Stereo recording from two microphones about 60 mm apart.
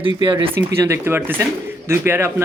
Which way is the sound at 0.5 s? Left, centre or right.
Right.